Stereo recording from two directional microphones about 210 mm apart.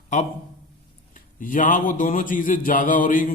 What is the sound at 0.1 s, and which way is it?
A man's voice, 35° left (ahead or behind).